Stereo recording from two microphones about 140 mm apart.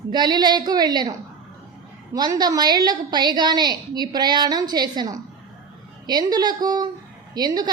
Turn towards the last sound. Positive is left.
turn(degrees=-30)  # may be behind; listen again after turning